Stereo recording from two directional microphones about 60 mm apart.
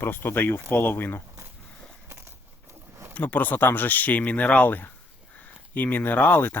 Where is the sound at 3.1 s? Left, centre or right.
Left.